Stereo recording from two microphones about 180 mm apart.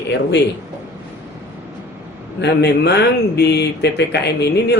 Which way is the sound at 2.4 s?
70° left (ahead or behind).